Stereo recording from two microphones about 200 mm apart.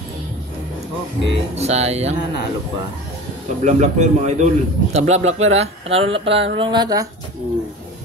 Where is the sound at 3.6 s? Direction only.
35° right (ahead or behind); by 7.0 s 20° right (ahead or behind).